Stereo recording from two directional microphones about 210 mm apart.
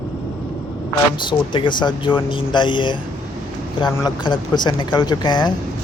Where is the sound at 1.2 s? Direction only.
20° left (ahead or behind).